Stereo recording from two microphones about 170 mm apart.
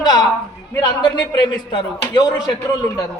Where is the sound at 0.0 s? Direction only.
25° left (ahead or behind).